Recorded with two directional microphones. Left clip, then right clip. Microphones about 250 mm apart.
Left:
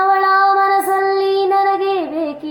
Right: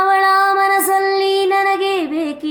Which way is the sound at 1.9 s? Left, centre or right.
Right.